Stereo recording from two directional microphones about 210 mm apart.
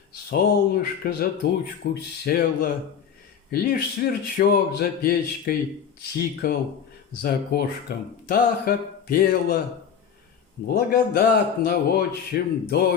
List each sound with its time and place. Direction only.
0.3 s speech: 50° left (ahead or behind)
10.8 s speech: 45° left (ahead or behind)